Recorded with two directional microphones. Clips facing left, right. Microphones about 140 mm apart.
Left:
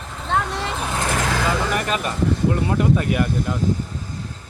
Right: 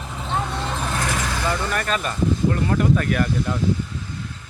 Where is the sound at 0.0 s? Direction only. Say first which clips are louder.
Left 3 dB; 5° right (ahead or behind).